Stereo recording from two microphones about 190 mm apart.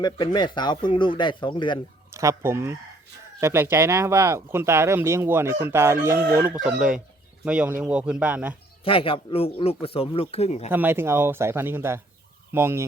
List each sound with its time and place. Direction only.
0.3 s speech: 25° left (ahead or behind)
2.1 s speech: 15° right (ahead or behind)
8.8 s speech: 30° left (ahead or behind)
10.7 s speech: 10° right (ahead or behind)